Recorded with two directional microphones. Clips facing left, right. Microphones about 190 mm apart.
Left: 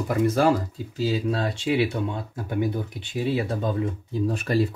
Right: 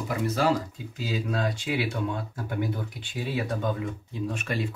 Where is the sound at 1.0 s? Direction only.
30° left (ahead or behind).